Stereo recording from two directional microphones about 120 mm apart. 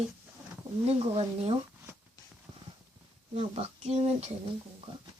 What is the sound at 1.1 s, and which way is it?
Speech, 55° right (ahead or behind).